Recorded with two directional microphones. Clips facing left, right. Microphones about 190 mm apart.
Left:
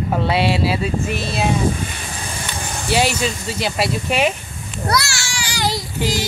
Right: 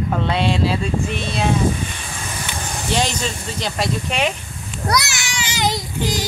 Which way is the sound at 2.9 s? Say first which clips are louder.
Left 4 dB; 10° left (ahead or behind).